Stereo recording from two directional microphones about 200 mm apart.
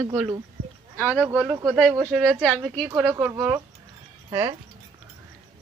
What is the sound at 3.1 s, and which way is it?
Speech, 15° right (ahead or behind).